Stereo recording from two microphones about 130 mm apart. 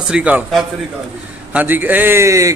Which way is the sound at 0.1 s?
10° right (ahead or behind).